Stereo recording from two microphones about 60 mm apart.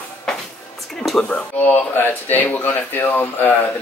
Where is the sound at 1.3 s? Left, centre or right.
Left.